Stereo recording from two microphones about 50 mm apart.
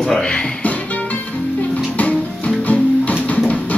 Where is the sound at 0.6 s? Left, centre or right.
Left.